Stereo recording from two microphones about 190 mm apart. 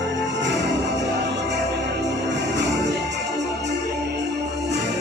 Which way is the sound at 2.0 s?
65° right (ahead or behind).